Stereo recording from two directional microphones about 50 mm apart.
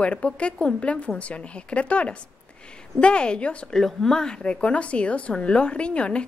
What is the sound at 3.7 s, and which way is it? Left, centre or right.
A woman's voice, centre.